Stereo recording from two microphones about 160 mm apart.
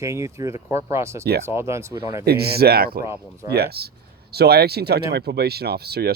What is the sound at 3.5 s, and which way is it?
Speech, 85° right.